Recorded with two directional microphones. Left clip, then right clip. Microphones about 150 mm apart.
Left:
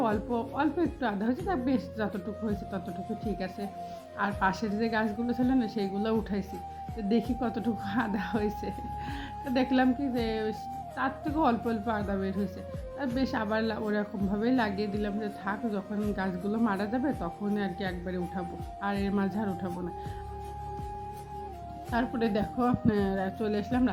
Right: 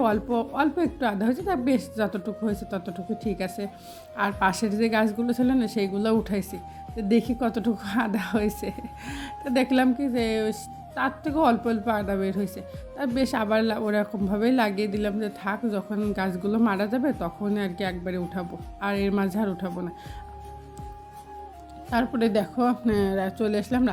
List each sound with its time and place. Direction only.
0.0 s a woman's voice: 45° right (ahead or behind)
21.8 s a woman's voice: 50° right (ahead or behind)